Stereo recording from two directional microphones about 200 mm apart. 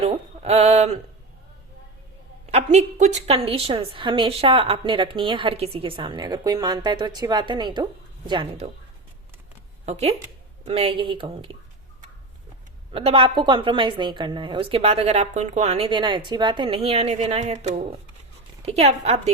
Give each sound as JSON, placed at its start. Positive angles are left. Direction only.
{"t": 0.0, "sound": "mantra", "side_deg": -30}
{"t": 2.7, "sound": "a woman's voice", "side_deg": -35}
{"t": 9.8, "sound": "a woman's voice", "side_deg": -30}
{"t": 12.9, "sound": "a woman's voice", "side_deg": -30}